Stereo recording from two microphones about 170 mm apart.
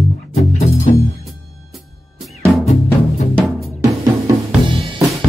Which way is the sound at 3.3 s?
Centre (ahead or behind).